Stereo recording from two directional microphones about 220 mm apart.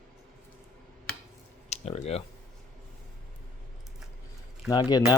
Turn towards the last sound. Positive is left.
turn(degrees=15)  # may be behind; listen again after turning